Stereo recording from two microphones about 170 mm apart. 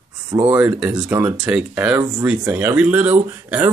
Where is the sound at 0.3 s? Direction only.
10° right (ahead or behind).